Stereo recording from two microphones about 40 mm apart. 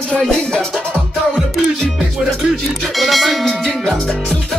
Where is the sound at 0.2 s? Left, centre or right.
Centre.